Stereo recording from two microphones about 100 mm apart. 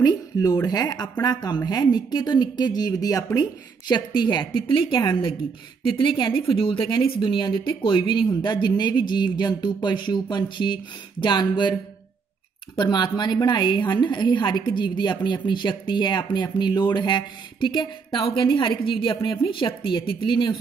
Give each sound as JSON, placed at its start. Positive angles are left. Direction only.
{"t": 0.0, "sound": "a woman's voice", "side_deg": 40}
{"t": 12.7, "sound": "speech", "side_deg": 50}
{"t": 18.2, "sound": "a woman's voice", "side_deg": 65}